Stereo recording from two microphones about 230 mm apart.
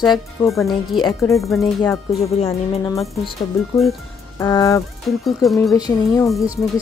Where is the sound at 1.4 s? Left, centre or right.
Centre.